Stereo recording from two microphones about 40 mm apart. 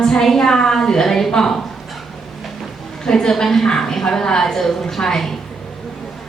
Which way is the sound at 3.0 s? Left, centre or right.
Centre.